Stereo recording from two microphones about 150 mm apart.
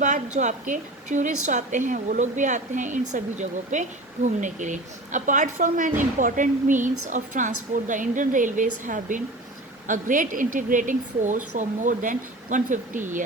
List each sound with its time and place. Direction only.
0.0 s speech: 55° right (ahead or behind)